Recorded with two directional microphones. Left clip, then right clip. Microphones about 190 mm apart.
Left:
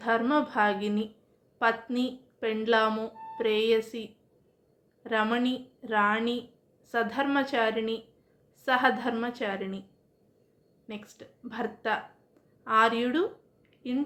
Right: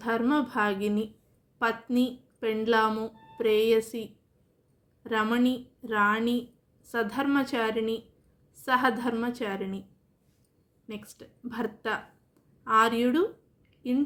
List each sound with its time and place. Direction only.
0.0 s speech: 30° right (ahead or behind)
10.8 s a woman's voice: 30° right (ahead or behind)